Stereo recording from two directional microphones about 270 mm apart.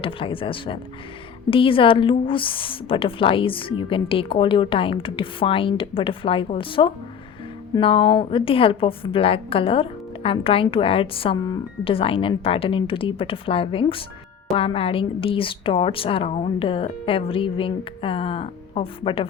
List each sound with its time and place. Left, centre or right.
0.0 s a woman's voice: centre